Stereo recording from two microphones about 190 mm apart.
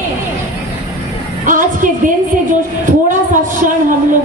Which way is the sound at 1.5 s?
45° right (ahead or behind).